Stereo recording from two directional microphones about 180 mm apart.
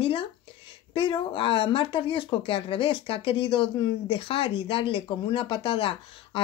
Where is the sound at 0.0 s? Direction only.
30° left (ahead or behind).